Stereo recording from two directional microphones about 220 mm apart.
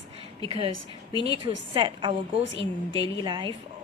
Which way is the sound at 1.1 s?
20° left (ahead or behind).